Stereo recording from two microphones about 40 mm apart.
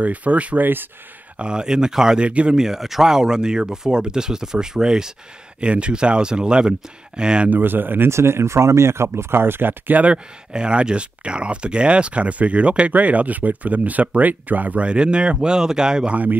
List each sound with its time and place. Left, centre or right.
0.0 s speech: right
1.4 s speech: right
2.1 s speech: right
2.5 s speech: centre
5.6 s speech: right
7.4 s speech: right
9.9 s speech: right
14.9 s speech: right